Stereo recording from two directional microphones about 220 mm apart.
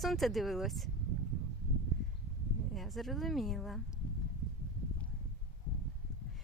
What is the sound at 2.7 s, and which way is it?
Speech, centre (ahead or behind).